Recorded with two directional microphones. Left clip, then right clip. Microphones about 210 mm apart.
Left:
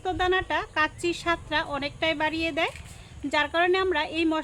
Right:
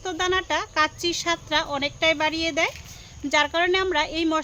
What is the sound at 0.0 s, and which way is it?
Speech, 30° right (ahead or behind).